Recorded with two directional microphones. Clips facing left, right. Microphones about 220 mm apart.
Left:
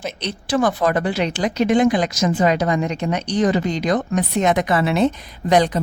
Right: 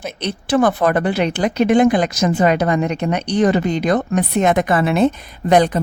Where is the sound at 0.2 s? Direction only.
55° right (ahead or behind).